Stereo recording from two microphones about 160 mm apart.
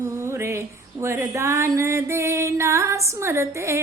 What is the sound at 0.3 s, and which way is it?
Female singing, 15° right (ahead or behind).